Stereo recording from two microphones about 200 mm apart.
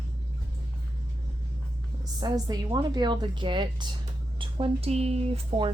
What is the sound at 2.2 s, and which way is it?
Speech, 20° right (ahead or behind).